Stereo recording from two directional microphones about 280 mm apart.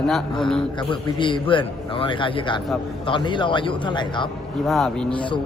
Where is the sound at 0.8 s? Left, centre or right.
Centre.